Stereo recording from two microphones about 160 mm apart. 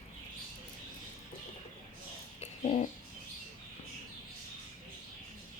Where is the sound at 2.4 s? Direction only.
40° left (ahead or behind).